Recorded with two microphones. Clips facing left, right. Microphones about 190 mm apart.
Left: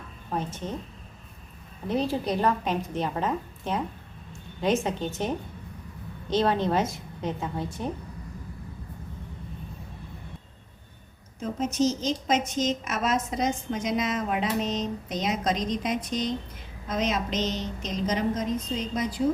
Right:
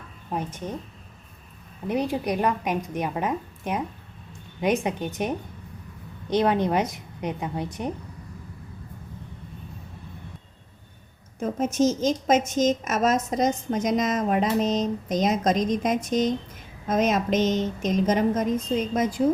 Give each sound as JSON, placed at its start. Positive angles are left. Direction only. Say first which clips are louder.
{"t": 0.3, "sound": "a woman's voice", "louder": "right 1 dB", "side_deg": -10}
{"t": 1.9, "sound": "a woman's voice", "louder": "right 1 dB", "side_deg": -15}
{"t": 6.3, "sound": "a woman's voice", "louder": "right 2 dB", "side_deg": -15}
{"t": 11.3, "sound": "a woman's voice", "louder": "right 3 dB", "side_deg": -50}